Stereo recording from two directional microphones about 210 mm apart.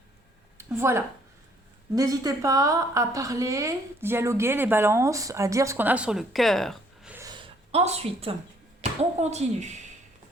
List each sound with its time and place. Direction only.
0.8 s a woman's voice: 10° right (ahead or behind)
7.2 s a sound: 20° right (ahead or behind)
8.8 s speech: 30° right (ahead or behind)